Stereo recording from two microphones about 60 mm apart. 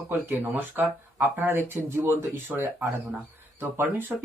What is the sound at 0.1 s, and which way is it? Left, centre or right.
Speech, right.